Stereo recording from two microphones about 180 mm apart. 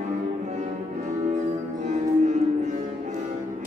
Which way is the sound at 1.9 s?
40° right (ahead or behind).